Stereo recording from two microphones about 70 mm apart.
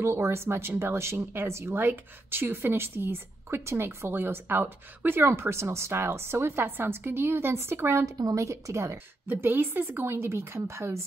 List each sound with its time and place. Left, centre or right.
0.0 s a woman's voice: right
1.8 s a woman's voice: right
8.0 s a woman's voice: right
8.9 s a woman's voice: right